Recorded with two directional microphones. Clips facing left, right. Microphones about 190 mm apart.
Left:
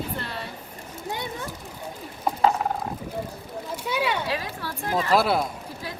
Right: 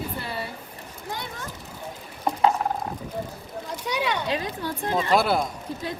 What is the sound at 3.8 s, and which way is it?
Speech, 5° left (ahead or behind).